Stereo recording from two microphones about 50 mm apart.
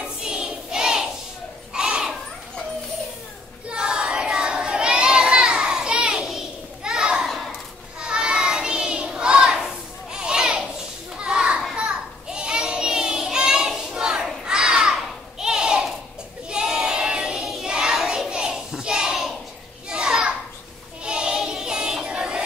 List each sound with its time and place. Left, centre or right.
0.0 s child singing: centre
1.7 s children playing: centre
3.6 s a sound: centre
7.2 s a sound: centre
8.0 s child singing: centre
10.1 s children playing: centre
11.7 s child singing: centre
19.9 s children playing: centre
21.0 s child singing: centre
22.0 s synthetic singing: centre